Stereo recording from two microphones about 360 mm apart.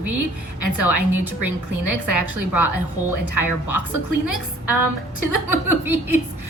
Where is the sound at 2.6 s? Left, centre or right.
Right.